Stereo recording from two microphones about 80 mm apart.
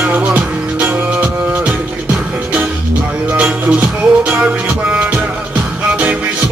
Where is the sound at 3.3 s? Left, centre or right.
Centre.